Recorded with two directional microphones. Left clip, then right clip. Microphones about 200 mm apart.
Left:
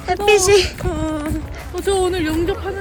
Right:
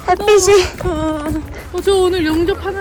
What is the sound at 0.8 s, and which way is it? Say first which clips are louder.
A woman's voice: right 4 dB; 5° right (ahead or behind).